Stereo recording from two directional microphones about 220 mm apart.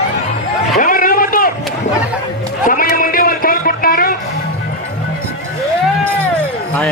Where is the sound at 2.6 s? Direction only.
40° left (ahead or behind).